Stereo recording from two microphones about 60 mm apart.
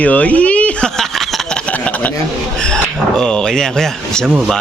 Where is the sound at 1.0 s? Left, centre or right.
Centre.